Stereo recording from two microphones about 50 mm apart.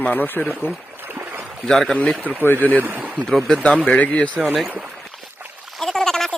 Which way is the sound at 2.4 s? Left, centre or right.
Left.